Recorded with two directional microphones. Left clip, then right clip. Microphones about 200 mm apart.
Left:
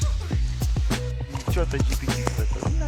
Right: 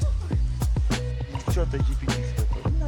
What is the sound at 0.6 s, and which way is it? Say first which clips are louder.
Music: left 1 dB; centre (ahead or behind).